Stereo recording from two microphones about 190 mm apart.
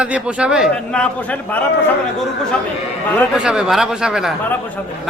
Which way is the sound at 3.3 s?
5° right (ahead or behind).